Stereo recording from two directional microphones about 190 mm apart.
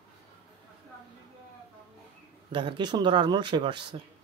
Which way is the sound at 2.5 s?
25° right (ahead or behind).